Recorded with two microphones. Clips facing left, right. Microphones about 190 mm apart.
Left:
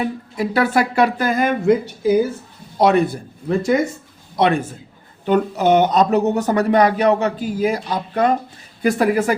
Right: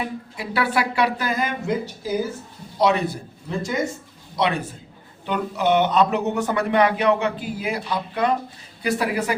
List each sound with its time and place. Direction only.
0.3 s speech: 45° left (ahead or behind); by 3.8 s 60° left (ahead or behind)
4.4 s speech: 50° left (ahead or behind)